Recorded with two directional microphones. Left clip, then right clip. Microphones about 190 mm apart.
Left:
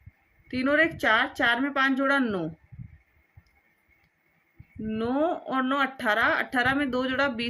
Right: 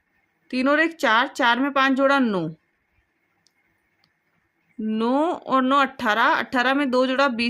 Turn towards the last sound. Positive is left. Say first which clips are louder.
# right 7 dB
turn(degrees=-55)  # may be behind; listen again after turning